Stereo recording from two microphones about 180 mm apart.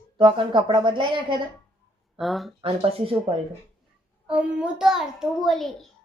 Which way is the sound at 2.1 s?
Centre (ahead or behind).